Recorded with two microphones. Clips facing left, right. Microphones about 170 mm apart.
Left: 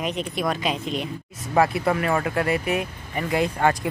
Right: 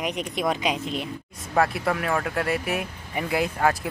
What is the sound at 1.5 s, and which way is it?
Speech, centre (ahead or behind).